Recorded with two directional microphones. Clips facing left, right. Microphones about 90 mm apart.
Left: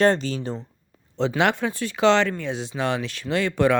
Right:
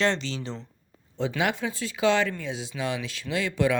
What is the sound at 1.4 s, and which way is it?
Speech, 60° left (ahead or behind).